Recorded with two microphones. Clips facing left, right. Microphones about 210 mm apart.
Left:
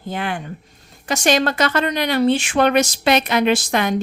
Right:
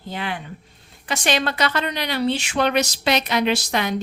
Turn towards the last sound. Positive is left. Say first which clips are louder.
# left 4 dB
turn(degrees=50)  # may be behind; listen again after turning